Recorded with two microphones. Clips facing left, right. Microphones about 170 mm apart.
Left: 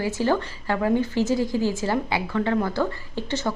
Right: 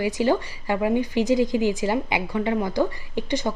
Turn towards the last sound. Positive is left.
turn(degrees=-15)  # may be behind; listen again after turning